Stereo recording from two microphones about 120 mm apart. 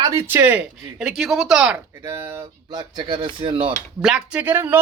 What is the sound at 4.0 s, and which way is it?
Speech, 5° right (ahead or behind).